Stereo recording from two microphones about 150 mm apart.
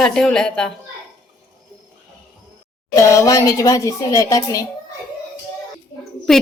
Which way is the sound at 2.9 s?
20° left (ahead or behind).